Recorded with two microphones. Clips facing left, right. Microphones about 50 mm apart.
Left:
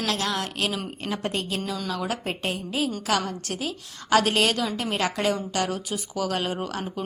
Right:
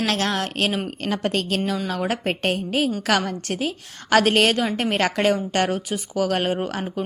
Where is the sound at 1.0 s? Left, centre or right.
Right.